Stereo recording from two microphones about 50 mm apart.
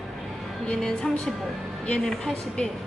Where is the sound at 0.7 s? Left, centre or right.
Centre.